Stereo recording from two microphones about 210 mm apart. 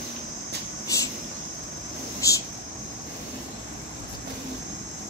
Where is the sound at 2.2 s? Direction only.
15° left (ahead or behind).